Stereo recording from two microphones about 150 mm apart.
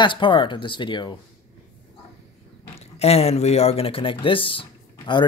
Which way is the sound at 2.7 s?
40° left (ahead or behind).